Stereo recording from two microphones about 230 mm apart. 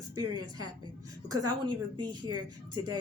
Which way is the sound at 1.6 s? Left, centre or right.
Centre.